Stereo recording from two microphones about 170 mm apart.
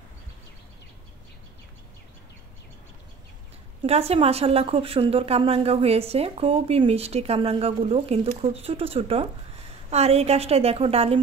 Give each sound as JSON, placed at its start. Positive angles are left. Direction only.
{"t": 3.8, "sound": "a woman's voice", "side_deg": -35}